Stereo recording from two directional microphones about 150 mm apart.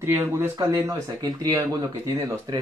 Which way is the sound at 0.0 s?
15° right (ahead or behind).